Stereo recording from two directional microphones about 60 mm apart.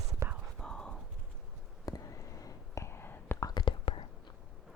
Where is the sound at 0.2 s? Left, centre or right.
Right.